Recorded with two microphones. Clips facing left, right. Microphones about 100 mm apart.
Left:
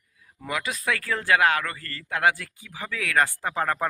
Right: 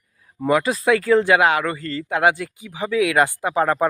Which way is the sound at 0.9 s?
20° right (ahead or behind).